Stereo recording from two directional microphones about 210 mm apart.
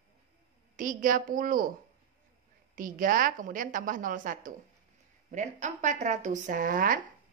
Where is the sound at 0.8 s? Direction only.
40° right (ahead or behind).